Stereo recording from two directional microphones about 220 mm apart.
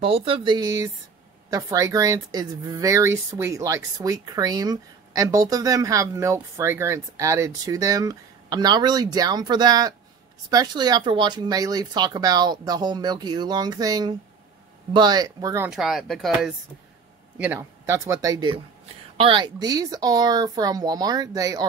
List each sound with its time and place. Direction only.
0.0 s speech: 25° right (ahead or behind)